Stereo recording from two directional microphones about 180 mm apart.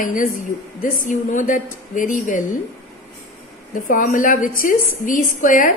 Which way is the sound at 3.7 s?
50° left (ahead or behind).